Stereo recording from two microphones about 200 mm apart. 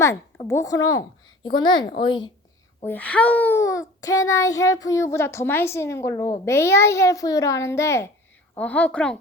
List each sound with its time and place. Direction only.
0.0 s a woman's voice: 15° left (ahead or behind)
2.8 s a child's voice: 10° left (ahead or behind)